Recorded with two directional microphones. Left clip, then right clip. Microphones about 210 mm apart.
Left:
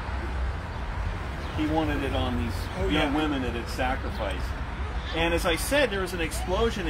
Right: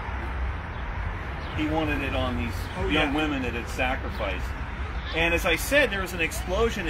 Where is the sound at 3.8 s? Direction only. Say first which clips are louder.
Right 1 dB; 15° right (ahead or behind).